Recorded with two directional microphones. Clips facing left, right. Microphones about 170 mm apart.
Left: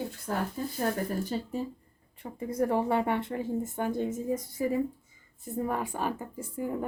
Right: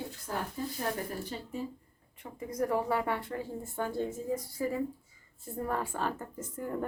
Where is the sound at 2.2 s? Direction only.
30° left (ahead or behind); by 6.9 s 10° left (ahead or behind).